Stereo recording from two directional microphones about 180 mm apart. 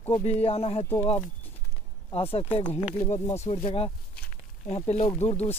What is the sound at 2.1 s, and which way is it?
Speech, 30° left (ahead or behind).